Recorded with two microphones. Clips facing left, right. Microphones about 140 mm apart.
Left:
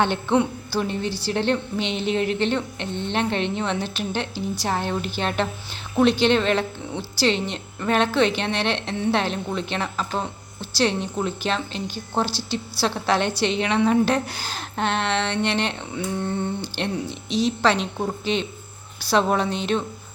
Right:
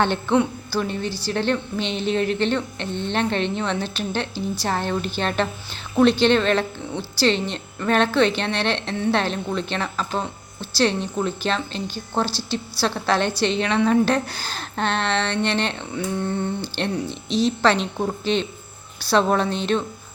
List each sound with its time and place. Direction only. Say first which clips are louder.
0.0 s a woman's voice: right 1 dB; 15° left (ahead or behind)
18.9 s a woman's voice: right 1 dB; 15° left (ahead or behind)